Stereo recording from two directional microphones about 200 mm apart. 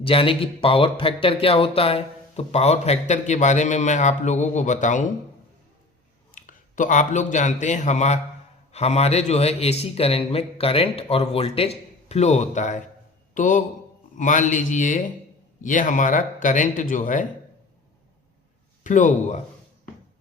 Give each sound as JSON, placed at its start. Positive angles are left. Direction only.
{"t": 0.0, "sound": "speech", "side_deg": 25}
{"t": 6.3, "sound": "a man's voice", "side_deg": 40}
{"t": 18.8, "sound": "speech", "side_deg": 40}